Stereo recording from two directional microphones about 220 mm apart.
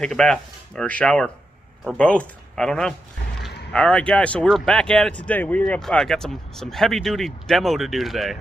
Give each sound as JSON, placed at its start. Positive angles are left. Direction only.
{"t": 0.0, "sound": "speech", "side_deg": 5}